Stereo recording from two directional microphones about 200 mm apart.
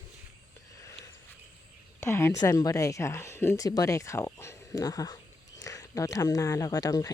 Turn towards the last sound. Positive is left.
turn(degrees=20)  # may be behind; listen again after turning